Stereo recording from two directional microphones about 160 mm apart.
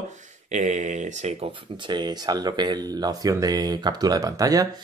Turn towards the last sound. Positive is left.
turn(degrees=-20)  # may be behind; listen again after turning